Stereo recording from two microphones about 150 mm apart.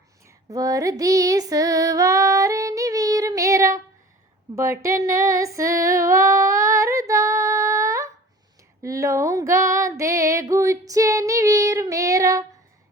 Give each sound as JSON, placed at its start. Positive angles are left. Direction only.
{"t": 0.3, "sound": "female singing", "side_deg": -25}